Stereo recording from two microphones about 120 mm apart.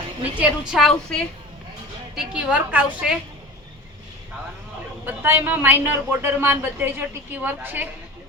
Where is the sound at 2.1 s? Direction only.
10° right (ahead or behind).